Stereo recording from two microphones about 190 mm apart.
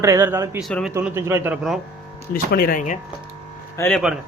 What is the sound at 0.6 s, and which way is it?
Speech, centre (ahead or behind).